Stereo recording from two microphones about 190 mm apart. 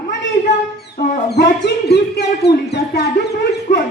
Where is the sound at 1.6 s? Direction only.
60° left (ahead or behind).